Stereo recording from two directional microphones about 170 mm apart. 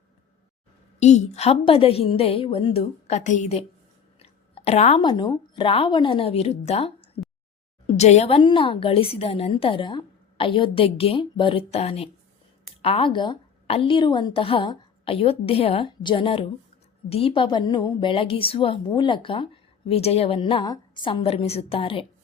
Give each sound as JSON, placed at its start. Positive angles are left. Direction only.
{"t": 0.9, "sound": "a woman's voice", "side_deg": 40}
{"t": 4.2, "sound": "a sound", "side_deg": 35}
{"t": 5.0, "sound": "a woman's voice", "side_deg": 25}